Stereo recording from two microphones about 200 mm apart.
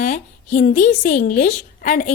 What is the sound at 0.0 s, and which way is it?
A woman's voice, 40° left (ahead or behind).